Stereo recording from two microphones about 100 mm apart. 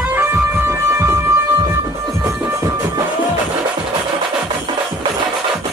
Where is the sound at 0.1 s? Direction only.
20° right (ahead or behind).